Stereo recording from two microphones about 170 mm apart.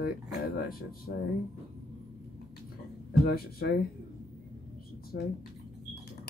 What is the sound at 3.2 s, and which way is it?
Speech, 65° left (ahead or behind).